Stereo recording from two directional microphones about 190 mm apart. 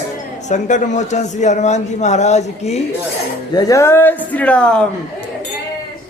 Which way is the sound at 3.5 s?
20° left (ahead or behind).